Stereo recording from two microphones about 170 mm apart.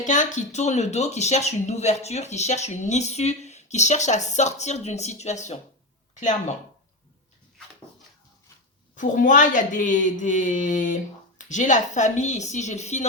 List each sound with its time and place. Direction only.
0.0 s speech: 45° left (ahead or behind)
9.0 s speech: 50° left (ahead or behind)